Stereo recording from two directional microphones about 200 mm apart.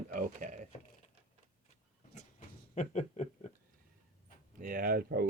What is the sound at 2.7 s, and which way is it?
Speech, 35° left (ahead or behind).